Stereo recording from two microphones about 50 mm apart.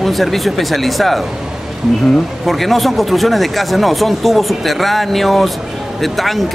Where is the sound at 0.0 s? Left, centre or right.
Centre.